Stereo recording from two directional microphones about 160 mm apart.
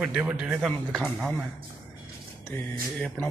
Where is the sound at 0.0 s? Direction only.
5° right (ahead or behind).